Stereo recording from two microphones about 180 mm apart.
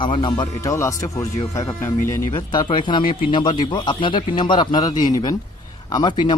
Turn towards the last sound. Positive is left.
turn(degrees=25)  # may be behind; listen again after turning